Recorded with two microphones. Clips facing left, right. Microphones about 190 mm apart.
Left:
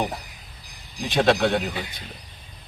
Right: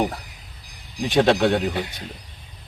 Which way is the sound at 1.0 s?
10° right (ahead or behind).